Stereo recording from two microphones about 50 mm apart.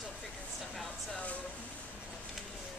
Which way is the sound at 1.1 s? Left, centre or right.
Left.